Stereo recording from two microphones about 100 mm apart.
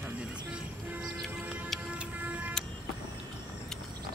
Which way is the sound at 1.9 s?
15° right (ahead or behind).